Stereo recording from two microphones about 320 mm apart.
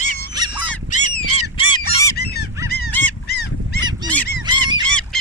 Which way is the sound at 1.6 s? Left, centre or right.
Centre.